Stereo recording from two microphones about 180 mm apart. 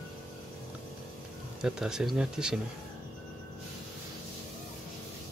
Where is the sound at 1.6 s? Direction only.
5° right (ahead or behind).